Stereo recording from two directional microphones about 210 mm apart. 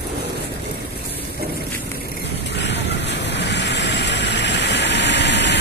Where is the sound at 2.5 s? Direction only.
55° left (ahead or behind).